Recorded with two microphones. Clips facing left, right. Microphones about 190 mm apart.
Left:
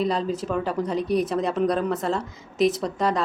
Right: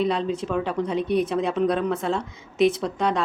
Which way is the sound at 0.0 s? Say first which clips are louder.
Right 1 dB; centre (ahead or behind).